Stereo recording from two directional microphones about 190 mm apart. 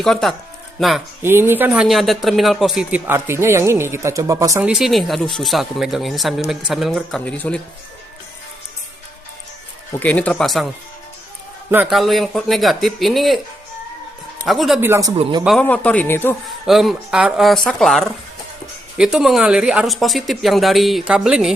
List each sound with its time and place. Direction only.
0.0 s speech: centre (ahead or behind)
1.2 s speech: 10° right (ahead or behind)
4.7 s speech: centre (ahead or behind)
9.9 s speech: 10° left (ahead or behind)
11.7 s speech: 5° right (ahead or behind)
14.4 s speech: centre (ahead or behind)
14.8 s speech: 15° right (ahead or behind)
15.2 s a man's voice: 25° right (ahead or behind)
15.4 s speech: 5° left (ahead or behind)
16.5 s speech: centre (ahead or behind)